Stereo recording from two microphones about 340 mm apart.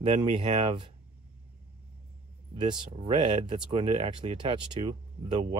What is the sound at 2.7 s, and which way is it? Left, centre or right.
Speech, centre.